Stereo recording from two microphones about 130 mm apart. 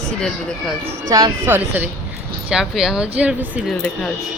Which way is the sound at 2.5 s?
5° right (ahead or behind).